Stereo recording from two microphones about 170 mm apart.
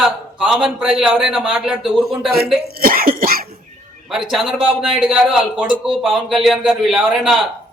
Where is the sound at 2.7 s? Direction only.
60° right (ahead or behind).